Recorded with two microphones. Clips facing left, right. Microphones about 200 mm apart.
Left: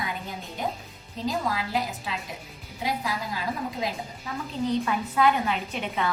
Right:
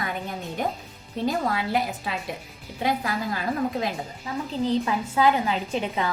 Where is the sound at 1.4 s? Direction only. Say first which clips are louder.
Right 3 dB; 60° right (ahead or behind).